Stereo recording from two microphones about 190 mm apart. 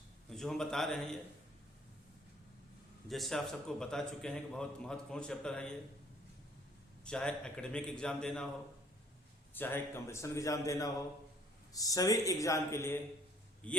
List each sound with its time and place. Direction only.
0.3 s a man's voice: 5° left (ahead or behind)
3.1 s a man's voice: centre (ahead or behind)
7.0 s a man's voice: 5° left (ahead or behind)
9.6 s a man's voice: 10° left (ahead or behind)